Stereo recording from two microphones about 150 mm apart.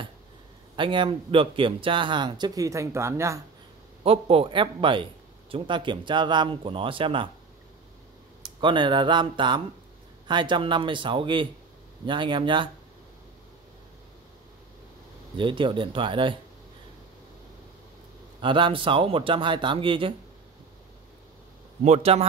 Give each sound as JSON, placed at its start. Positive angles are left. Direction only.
{"t": 0.7, "sound": "speech", "side_deg": -35}
{"t": 4.0, "sound": "speech", "side_deg": -40}
{"t": 8.5, "sound": "speech", "side_deg": -30}
{"t": 15.3, "sound": "speech", "side_deg": -35}
{"t": 18.4, "sound": "speech", "side_deg": -35}
{"t": 21.8, "sound": "a man's voice", "side_deg": -45}